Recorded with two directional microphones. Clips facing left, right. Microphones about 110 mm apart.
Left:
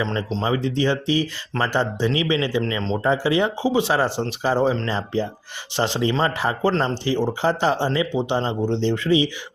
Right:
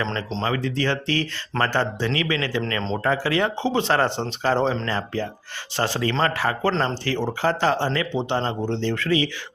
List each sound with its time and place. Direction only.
0.4 s speech: 20° left (ahead or behind)